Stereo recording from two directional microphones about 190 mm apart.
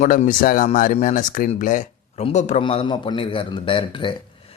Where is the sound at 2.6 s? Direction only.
25° left (ahead or behind).